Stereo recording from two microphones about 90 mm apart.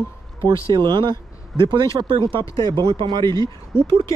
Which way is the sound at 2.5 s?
60° right (ahead or behind).